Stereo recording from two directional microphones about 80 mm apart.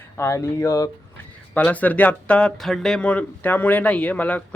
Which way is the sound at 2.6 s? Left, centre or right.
Centre.